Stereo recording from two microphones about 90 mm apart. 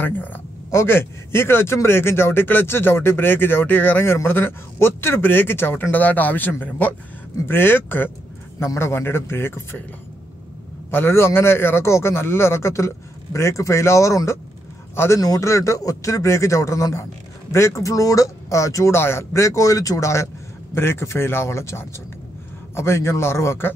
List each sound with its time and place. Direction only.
0.0 s a sound: 20° left (ahead or behind)
0.7 s speech: 25° left (ahead or behind)
10.9 s speech: 25° left (ahead or behind)